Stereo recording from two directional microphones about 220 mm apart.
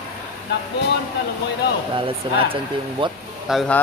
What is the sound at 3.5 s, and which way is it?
Speech, centre (ahead or behind).